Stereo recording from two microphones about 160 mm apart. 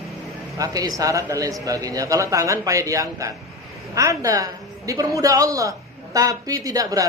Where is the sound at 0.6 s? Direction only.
20° right (ahead or behind).